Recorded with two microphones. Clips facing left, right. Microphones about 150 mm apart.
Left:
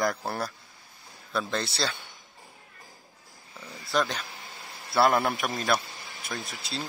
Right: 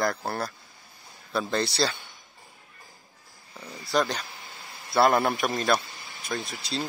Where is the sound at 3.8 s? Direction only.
35° right (ahead or behind).